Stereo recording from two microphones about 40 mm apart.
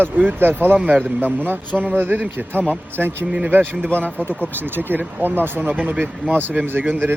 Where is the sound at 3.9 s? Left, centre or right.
Left.